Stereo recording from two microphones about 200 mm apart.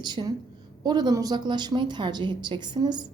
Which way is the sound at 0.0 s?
20° right (ahead or behind).